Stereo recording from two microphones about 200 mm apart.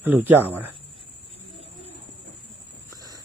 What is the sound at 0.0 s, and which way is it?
Speech, 10° right (ahead or behind).